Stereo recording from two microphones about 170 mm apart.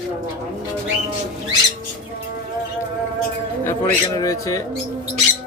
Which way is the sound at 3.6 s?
15° left (ahead or behind).